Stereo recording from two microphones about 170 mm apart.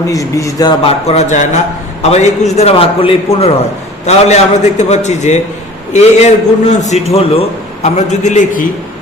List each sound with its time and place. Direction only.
0.1 s a man's voice: 20° left (ahead or behind)
0.8 s a man's voice: 35° left (ahead or behind)